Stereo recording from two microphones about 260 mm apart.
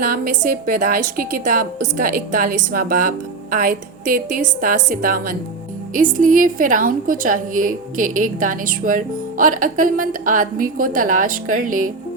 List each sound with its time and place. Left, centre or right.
0.1 s a woman's voice: right